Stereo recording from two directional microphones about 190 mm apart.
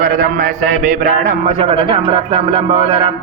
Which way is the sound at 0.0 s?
40° right (ahead or behind).